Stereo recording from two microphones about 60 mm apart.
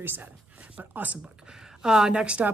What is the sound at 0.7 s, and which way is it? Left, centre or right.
Speech, right.